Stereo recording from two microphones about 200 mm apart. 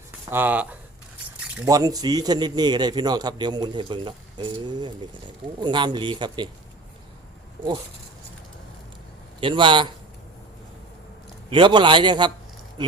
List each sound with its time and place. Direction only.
0.3 s speech: 10° right (ahead or behind)
1.6 s a man's voice: 20° right (ahead or behind)
9.4 s a man's voice: 25° right (ahead or behind)
11.5 s a man's voice: 25° right (ahead or behind)